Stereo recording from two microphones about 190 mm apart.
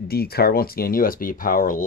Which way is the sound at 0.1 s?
55° left (ahead or behind).